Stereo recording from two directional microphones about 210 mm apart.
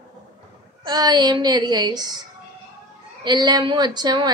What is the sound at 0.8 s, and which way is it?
A woman's voice, 20° right (ahead or behind).